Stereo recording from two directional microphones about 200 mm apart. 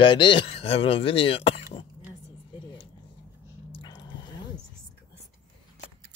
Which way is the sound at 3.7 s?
25° left (ahead or behind).